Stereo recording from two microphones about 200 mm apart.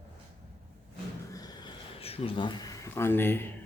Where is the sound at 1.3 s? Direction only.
20° left (ahead or behind).